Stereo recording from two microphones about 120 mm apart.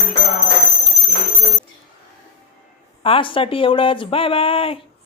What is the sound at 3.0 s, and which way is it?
A woman's voice, 50° left (ahead or behind).